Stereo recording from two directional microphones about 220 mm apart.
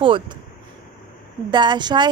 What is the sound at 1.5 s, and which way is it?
Speech, 20° right (ahead or behind).